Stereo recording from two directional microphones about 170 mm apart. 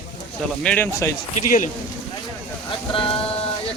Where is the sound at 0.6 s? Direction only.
5° left (ahead or behind).